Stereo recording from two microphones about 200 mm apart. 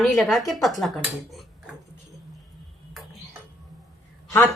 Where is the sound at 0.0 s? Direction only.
Centre (ahead or behind).